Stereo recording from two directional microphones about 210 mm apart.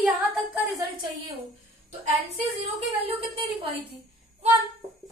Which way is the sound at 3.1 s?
25° right (ahead or behind).